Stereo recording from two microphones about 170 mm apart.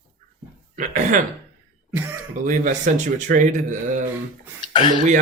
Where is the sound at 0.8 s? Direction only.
45° right (ahead or behind).